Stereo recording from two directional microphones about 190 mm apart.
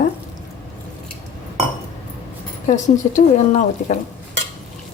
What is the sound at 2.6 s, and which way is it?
Speech, 40° left (ahead or behind).